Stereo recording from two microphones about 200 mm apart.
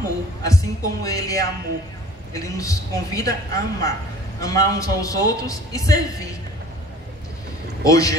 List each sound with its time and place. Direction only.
0.4 s a man's voice: 15° left (ahead or behind)
7.8 s a man's voice: 15° left (ahead or behind)